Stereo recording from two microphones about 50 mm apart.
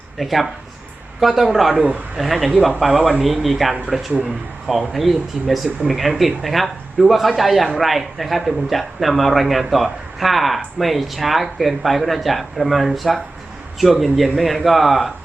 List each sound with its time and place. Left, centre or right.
0.2 s speech: centre
1.7 s speech: right
2.1 s speech: centre
4.9 s speech: centre